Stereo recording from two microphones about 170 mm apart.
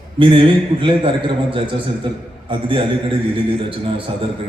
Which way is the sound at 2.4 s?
30° right (ahead or behind).